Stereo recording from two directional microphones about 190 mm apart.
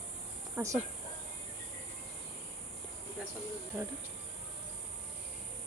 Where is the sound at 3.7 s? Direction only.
15° right (ahead or behind).